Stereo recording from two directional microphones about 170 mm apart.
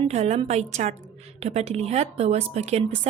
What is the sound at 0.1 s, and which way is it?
A woman's voice, 40° right (ahead or behind).